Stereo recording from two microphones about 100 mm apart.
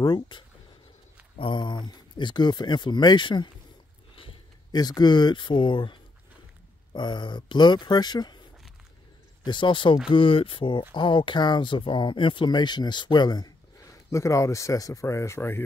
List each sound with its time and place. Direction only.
0.0 s speech: 50° left (ahead or behind)
1.4 s speech: 50° left (ahead or behind)
4.7 s speech: 40° left (ahead or behind)
9.4 s speech: 50° left (ahead or behind)
14.1 s speech: 30° left (ahead or behind)